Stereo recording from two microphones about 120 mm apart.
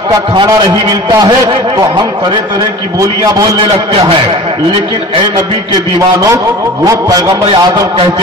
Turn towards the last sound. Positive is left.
turn(degrees=-30)  # may be behind; listen again after turning